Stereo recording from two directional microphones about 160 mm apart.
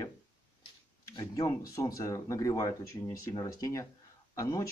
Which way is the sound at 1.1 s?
25° left (ahead or behind).